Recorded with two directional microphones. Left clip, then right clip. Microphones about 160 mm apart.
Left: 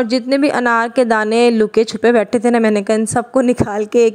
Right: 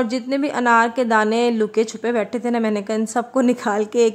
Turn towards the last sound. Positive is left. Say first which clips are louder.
# left 4 dB
turn(degrees=35)  # may be behind; listen again after turning